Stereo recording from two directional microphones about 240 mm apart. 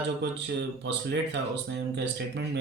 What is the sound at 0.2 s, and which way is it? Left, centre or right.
Speech, right.